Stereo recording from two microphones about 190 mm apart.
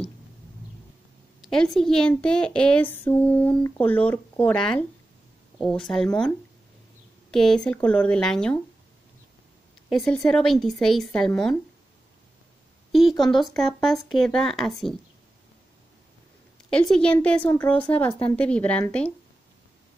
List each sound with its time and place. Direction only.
1.4 s a woman's voice: 5° left (ahead or behind)
9.8 s a woman's voice: centre (ahead or behind)
13.2 s a woman's voice: centre (ahead or behind)
16.7 s a woman's voice: 5° left (ahead or behind)